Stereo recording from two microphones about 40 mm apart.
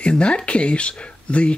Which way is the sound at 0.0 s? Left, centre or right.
Left.